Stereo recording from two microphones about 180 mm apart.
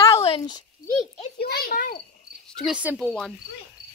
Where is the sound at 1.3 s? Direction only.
55° left (ahead or behind).